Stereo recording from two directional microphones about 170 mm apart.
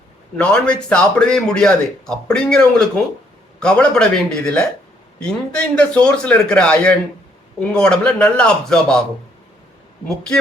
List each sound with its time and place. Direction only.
0.3 s a man's voice: 5° left (ahead or behind)